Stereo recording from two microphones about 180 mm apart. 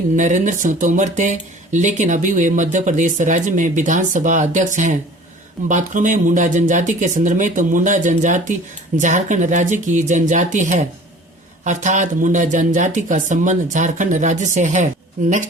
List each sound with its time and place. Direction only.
0.2 s speech: 45° right (ahead or behind)